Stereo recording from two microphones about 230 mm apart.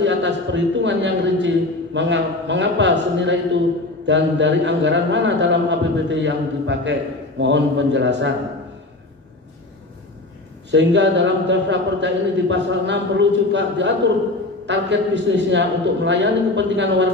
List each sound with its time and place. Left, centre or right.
0.0 s a man's voice: right
10.7 s a man's voice: right